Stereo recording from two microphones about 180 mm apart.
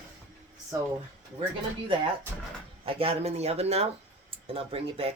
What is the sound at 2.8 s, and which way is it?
Speech, 30° right (ahead or behind).